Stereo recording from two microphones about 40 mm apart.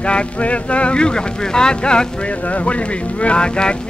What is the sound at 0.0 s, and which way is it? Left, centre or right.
Speech, left.